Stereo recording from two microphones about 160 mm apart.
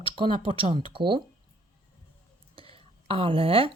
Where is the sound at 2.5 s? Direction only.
35° right (ahead or behind).